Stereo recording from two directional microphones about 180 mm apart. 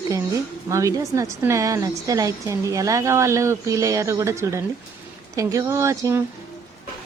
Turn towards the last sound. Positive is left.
turn(degrees=-15)  # may be behind; listen again after turning